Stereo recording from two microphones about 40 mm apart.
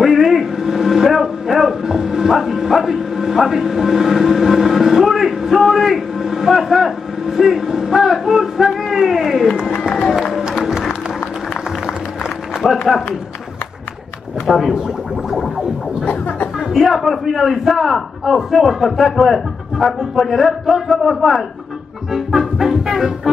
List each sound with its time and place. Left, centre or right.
0.0 s a sound: centre
12.6 s run: centre
14.4 s speech: centre
16.1 s music: left
16.5 s a sound: centre
17.0 s a man's voice: centre
22.1 s music: centre